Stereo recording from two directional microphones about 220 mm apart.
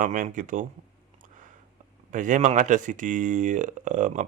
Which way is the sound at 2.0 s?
35° right (ahead or behind).